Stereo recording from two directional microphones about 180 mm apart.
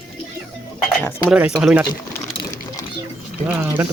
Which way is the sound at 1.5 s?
5° right (ahead or behind).